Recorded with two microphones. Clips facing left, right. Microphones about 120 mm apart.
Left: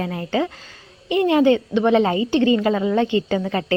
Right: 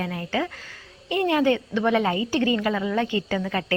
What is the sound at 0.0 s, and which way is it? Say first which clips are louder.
A woman's voice: left 4 dB; 25° left (ahead or behind).